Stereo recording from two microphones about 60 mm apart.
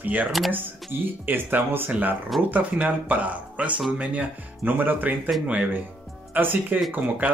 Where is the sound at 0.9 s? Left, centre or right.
Right.